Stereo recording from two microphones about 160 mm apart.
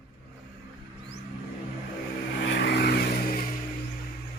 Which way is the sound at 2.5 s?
90° left.